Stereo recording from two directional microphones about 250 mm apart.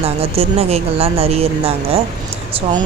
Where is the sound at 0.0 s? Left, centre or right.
Right.